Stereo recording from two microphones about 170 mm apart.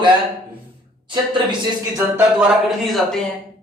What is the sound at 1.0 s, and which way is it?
Speech, 30° right (ahead or behind).